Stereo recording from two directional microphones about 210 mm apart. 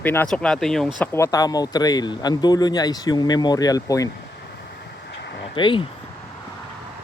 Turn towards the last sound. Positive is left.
turn(degrees=20)  # may be behind; listen again after turning